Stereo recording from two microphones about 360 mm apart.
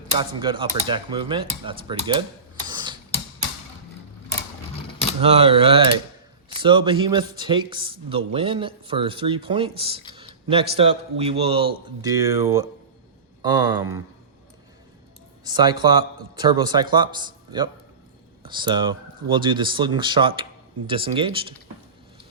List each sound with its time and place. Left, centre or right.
0.2 s speech: centre
2.6 s tick-tock: centre
5.2 s speech: centre
15.4 s speech: centre